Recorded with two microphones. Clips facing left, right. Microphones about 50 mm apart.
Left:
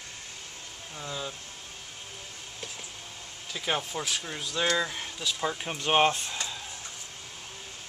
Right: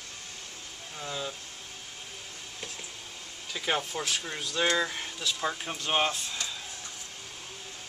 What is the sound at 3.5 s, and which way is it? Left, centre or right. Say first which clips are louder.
Speech: even; centre.